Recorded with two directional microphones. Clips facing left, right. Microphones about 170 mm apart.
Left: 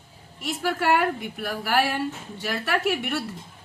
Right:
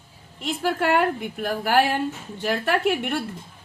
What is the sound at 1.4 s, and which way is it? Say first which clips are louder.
A woman's voice: right 4 dB; 45° right (ahead or behind).